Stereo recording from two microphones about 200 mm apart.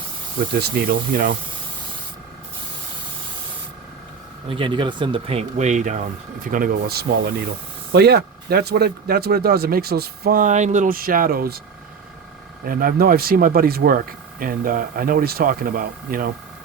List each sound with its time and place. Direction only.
0.6 s speech: 50° right (ahead or behind)
4.4 s speech: 25° right (ahead or behind); by 11.6 s 50° right (ahead or behind)
12.6 s speech: 45° right (ahead or behind)